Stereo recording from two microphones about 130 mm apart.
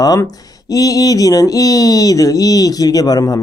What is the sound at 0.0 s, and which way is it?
Speech, 30° left (ahead or behind).